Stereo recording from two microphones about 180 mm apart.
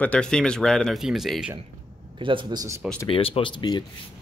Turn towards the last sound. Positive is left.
turn(degrees=25)  # may be behind; listen again after turning